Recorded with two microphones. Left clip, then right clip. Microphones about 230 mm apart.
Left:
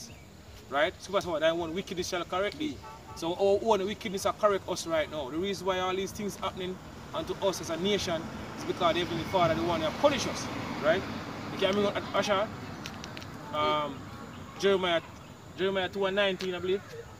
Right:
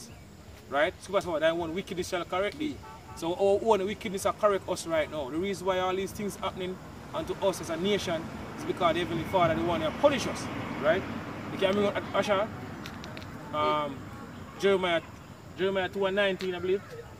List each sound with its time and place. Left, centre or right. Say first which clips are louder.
0.7 s speech: right 1 dB; centre
10.3 s speech: even; left
11.0 s vehicle: right 1 dB; left
11.6 s speech: right 1 dB; centre
13.5 s speech: right 1 dB; centre